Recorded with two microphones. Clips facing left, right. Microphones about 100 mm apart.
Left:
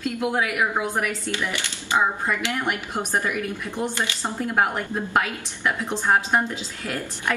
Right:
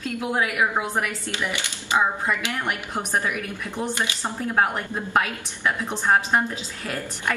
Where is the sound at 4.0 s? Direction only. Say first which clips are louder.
Left 1 dB; 20° right (ahead or behind).